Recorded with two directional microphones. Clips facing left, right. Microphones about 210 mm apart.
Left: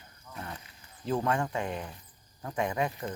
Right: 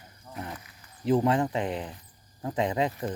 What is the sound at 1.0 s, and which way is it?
Speech, 20° right (ahead or behind).